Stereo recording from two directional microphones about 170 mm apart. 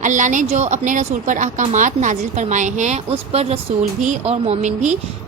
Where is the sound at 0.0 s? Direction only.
45° right (ahead or behind).